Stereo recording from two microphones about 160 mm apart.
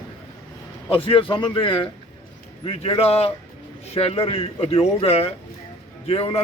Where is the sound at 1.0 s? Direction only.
35° left (ahead or behind).